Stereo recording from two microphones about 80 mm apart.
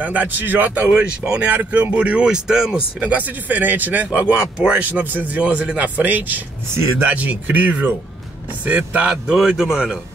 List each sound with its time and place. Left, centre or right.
0.0 s speech: right
6.7 s speech: right
7.1 s speech: centre